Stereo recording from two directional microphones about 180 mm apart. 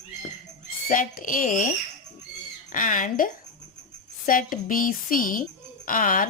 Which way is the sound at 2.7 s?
50° left (ahead or behind).